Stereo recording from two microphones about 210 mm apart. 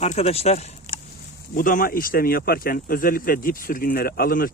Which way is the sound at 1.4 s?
40° left (ahead or behind).